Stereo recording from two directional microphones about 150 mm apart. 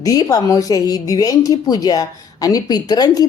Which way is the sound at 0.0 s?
25° left (ahead or behind).